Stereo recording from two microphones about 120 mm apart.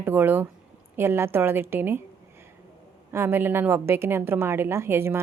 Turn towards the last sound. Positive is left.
turn(degrees=-20)  # may be behind; listen again after turning